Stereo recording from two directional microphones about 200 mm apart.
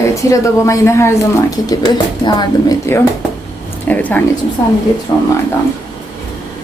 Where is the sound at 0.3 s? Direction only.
15° left (ahead or behind).